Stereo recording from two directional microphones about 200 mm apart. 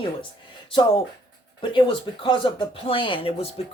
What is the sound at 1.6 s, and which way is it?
Speech, 25° left (ahead or behind).